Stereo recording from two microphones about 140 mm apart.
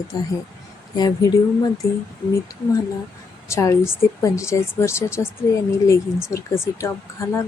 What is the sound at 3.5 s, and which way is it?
Speech, 20° left (ahead or behind).